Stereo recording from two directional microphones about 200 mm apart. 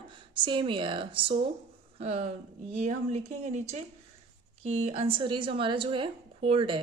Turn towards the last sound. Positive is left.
turn(degrees=-25)  # may be behind; listen again after turning